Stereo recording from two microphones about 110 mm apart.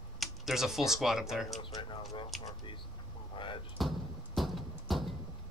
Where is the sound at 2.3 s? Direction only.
Centre (ahead or behind).